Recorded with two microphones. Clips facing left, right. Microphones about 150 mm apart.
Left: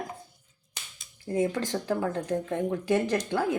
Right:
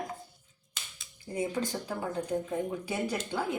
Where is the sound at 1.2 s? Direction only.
85° left.